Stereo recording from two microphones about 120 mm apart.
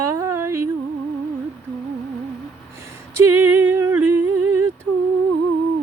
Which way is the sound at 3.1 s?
15° right (ahead or behind).